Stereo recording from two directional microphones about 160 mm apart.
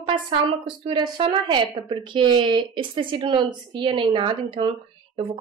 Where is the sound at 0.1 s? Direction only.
30° right (ahead or behind).